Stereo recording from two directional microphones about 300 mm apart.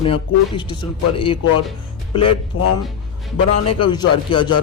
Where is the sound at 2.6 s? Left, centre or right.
Left.